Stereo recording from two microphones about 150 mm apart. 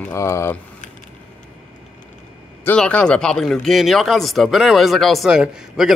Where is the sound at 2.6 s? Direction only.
10° left (ahead or behind).